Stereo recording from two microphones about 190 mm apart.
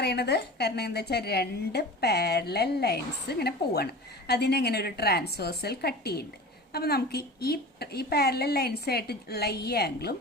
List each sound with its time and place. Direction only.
0.0 s a woman's voice: 60° left (ahead or behind)